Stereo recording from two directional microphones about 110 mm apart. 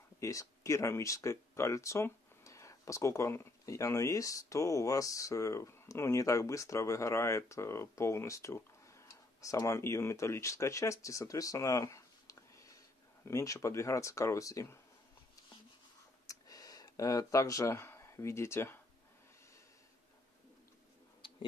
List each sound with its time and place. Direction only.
0.2 s speech: 30° left (ahead or behind)
16.3 s a sound: 35° left (ahead or behind)
21.2 s tick-tock: 45° left (ahead or behind)